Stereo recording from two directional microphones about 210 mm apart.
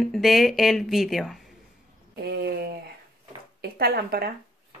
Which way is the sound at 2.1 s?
50° right (ahead or behind).